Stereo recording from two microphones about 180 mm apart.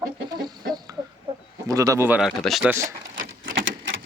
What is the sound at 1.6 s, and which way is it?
Speech, 20° right (ahead or behind).